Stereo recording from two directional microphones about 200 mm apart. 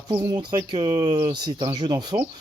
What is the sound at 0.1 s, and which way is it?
Speech, 20° right (ahead or behind).